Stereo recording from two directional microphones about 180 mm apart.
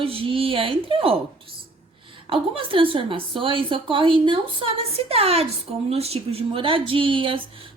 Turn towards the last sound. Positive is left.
turn(degrees=-30)  # may be behind; listen again after turning